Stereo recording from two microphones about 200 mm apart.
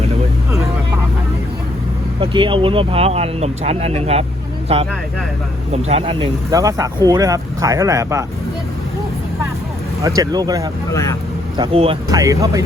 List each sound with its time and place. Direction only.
2.2 s speech: 25° right (ahead or behind)
6.5 s speech: 15° right (ahead or behind)
10.0 s speech: 20° right (ahead or behind)
10.9 s speech: 15° left (ahead or behind)
11.5 s speech: 25° right (ahead or behind)
12.1 s speech: 15° right (ahead or behind)